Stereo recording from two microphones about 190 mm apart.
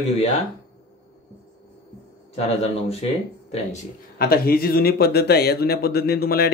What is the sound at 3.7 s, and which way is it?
Speech, 50° left (ahead or behind).